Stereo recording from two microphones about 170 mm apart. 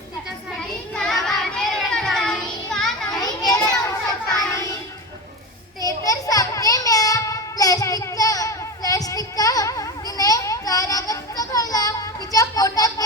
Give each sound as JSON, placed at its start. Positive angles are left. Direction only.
{"t": 1.2, "sound": "child singing", "side_deg": 0}
{"t": 3.1, "sound": "children playing", "side_deg": 20}
{"t": 4.0, "sound": "child singing", "side_deg": 20}
{"t": 6.0, "sound": "child singing", "side_deg": 20}